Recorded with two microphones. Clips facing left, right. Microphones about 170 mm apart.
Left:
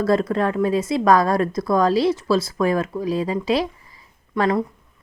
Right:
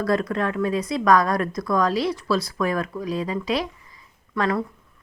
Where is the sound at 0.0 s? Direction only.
30° left (ahead or behind).